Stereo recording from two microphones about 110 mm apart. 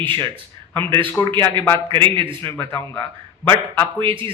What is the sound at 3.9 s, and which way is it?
Speech, 50° right (ahead or behind).